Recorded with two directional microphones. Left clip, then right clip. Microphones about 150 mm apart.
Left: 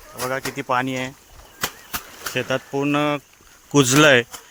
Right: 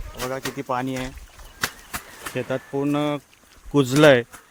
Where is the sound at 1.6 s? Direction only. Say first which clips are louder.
Left 1 dB; 45° left (ahead or behind).